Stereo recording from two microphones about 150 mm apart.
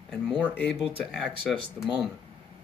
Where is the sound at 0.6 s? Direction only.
5° left (ahead or behind).